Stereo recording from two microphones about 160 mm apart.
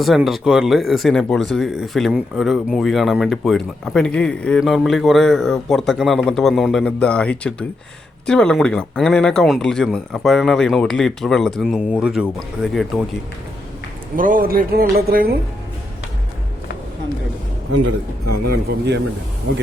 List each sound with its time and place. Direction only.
0.0 s speech: centre (ahead or behind)
14.2 s speech: 60° right (ahead or behind)
18.4 s a man's voice: 90° right